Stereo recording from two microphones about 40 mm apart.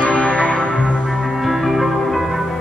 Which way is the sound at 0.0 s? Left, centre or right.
Left.